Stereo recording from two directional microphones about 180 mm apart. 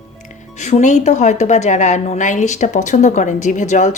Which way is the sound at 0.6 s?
40° left (ahead or behind).